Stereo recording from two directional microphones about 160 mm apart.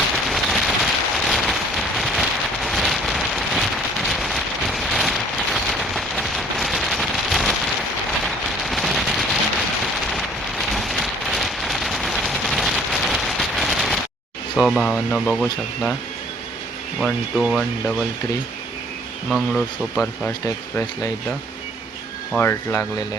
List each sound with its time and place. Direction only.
0.3 s rain on surface: centre (ahead or behind)
8.2 s fireworks: centre (ahead or behind)
10.1 s rain on surface: centre (ahead or behind)
14.5 s speech: centre (ahead or behind)
17.0 s speech: centre (ahead or behind)
19.3 s speech: 5° left (ahead or behind)
20.4 s speech: 20° left (ahead or behind)
22.3 s speech: 10° left (ahead or behind)